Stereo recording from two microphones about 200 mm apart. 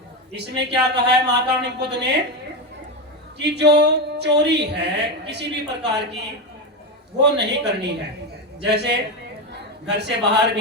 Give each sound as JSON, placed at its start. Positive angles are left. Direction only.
{"t": 0.3, "sound": "speech", "side_deg": -55}
{"t": 3.3, "sound": "a man's voice", "side_deg": -55}